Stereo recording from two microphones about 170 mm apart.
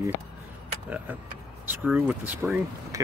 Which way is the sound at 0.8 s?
10° right (ahead or behind).